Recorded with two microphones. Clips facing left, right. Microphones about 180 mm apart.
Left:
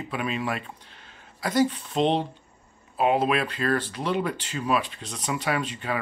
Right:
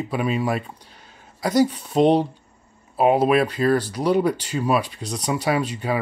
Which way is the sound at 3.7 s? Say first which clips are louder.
Right 7 dB; 40° right (ahead or behind).